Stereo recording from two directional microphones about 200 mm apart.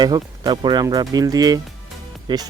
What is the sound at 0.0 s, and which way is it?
Speech, 20° right (ahead or behind).